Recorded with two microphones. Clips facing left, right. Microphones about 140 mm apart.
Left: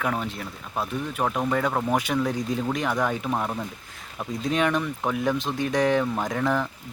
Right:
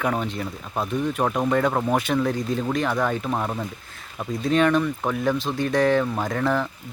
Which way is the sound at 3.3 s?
Centre (ahead or behind).